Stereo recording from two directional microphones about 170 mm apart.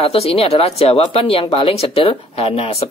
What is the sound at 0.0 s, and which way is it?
Speech, 35° left (ahead or behind).